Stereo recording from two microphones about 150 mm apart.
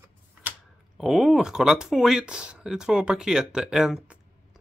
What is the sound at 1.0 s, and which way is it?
Speech, 5° right (ahead or behind).